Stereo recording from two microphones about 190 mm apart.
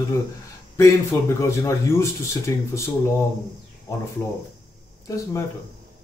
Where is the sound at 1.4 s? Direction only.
15° left (ahead or behind).